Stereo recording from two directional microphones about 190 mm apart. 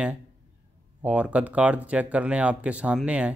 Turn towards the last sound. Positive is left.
turn(degrees=-5)  # may be behind; listen again after turning